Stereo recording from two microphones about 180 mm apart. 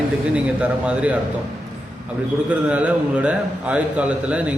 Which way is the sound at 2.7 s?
10° right (ahead or behind).